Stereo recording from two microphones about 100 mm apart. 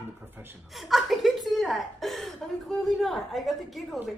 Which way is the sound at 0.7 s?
Centre (ahead or behind).